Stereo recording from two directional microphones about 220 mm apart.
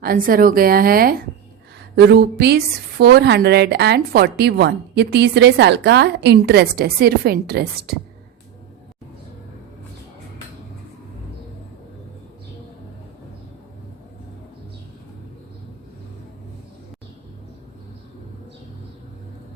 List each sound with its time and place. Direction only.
0.0 s a woman's voice: 40° right (ahead or behind)